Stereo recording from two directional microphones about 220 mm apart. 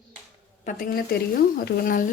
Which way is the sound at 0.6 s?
40° left (ahead or behind).